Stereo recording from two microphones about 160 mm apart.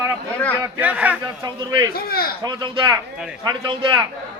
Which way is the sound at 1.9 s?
70° left (ahead or behind).